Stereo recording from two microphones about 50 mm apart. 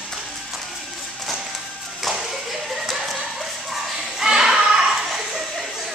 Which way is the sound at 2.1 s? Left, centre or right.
Centre.